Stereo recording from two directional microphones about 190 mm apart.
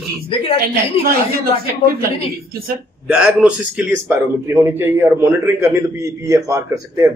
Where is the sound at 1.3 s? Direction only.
50° right (ahead or behind).